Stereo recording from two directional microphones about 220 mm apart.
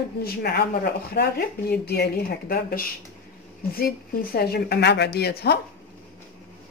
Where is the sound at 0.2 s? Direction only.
45° left (ahead or behind).